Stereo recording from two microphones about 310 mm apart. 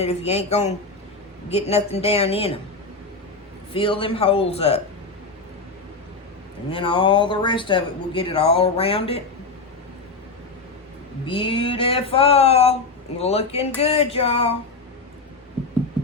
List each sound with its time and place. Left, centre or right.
0.0 s speech: centre
3.7 s speech: centre
6.7 s speech: centre
11.3 s speech: centre